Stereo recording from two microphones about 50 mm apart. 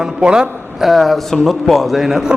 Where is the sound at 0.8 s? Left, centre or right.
Centre.